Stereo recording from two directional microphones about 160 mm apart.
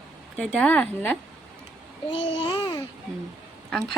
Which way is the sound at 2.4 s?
30° left (ahead or behind).